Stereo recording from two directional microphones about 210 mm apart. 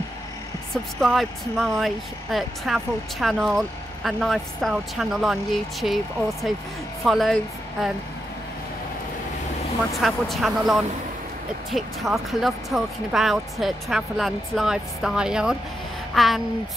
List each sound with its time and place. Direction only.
1.0 s speech: centre (ahead or behind)
9.9 s speech: centre (ahead or behind)